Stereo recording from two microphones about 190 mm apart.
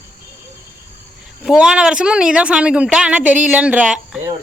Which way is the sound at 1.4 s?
5° right (ahead or behind).